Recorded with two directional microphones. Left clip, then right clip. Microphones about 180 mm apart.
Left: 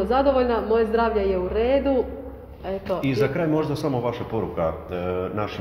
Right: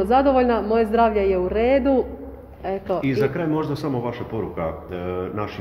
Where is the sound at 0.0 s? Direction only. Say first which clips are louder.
Right 3 dB; 65° right (ahead or behind).